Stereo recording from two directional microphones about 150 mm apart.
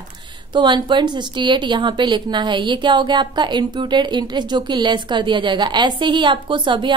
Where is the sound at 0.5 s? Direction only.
30° right (ahead or behind).